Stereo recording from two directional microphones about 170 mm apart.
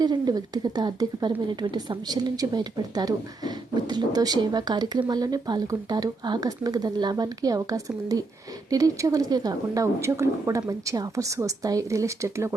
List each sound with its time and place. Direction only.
0.0 s speech: 25° right (ahead or behind)